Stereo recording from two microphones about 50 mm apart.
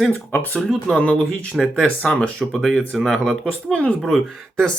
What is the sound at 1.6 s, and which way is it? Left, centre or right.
Speech, centre.